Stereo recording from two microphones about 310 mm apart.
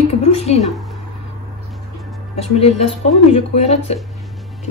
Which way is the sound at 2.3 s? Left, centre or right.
Centre.